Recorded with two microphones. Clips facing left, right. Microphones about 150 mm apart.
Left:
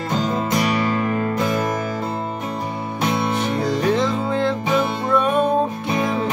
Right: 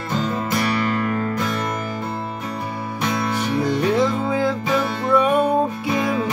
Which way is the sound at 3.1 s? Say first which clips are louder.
Left 2 dB; 25° left (ahead or behind).